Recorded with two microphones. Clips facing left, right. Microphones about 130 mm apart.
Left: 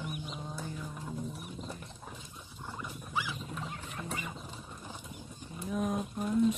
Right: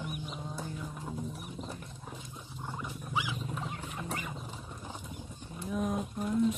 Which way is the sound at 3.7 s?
5° right (ahead or behind).